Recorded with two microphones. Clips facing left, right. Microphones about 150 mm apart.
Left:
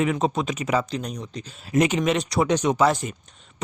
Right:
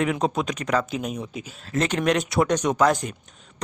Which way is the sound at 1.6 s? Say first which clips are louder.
Left 4 dB; 10° left (ahead or behind).